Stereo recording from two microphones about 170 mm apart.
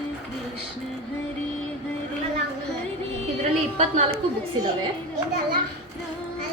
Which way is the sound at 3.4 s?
40° right (ahead or behind).